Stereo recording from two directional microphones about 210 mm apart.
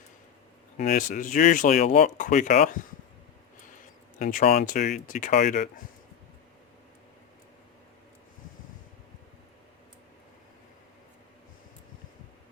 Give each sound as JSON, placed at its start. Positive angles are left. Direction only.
{"t": 0.8, "sound": "speech", "side_deg": 35}
{"t": 4.2, "sound": "speech", "side_deg": 40}